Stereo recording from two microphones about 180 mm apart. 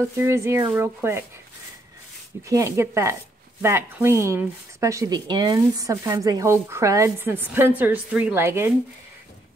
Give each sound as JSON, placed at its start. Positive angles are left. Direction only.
{"t": 0.2, "sound": "speech", "side_deg": -15}
{"t": 2.5, "sound": "speech", "side_deg": -15}